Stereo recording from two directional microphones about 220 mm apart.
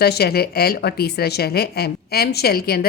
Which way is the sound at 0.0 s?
45° left (ahead or behind).